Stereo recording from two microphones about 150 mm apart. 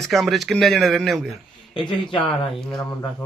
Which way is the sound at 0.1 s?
Centre (ahead or behind).